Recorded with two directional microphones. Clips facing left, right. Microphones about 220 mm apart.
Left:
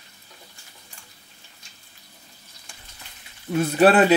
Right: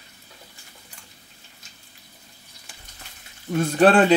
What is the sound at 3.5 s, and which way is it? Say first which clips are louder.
Speech: even; 5° left (ahead or behind).